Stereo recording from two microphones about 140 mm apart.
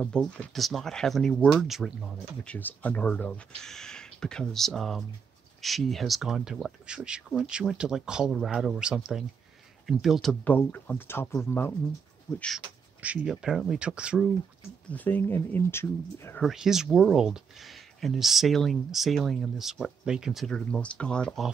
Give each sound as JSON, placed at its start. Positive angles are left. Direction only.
{"t": 0.0, "sound": "speech", "side_deg": 5}
{"t": 2.4, "sound": "speech", "side_deg": 10}
{"t": 10.4, "sound": "speech", "side_deg": 15}
{"t": 12.4, "sound": "speech", "side_deg": 5}
{"t": 13.0, "sound": "speech", "side_deg": -10}
{"t": 14.9, "sound": "speech", "side_deg": 10}
{"t": 16.3, "sound": "speech", "side_deg": 0}